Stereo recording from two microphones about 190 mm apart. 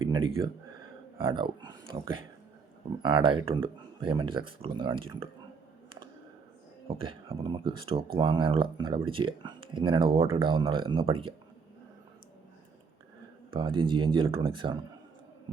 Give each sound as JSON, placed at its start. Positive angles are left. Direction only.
{"t": 0.0, "sound": "a sound", "side_deg": -25}
{"t": 1.2, "sound": "speech", "side_deg": -25}
{"t": 6.8, "sound": "speech", "side_deg": -30}
{"t": 13.5, "sound": "speech", "side_deg": -25}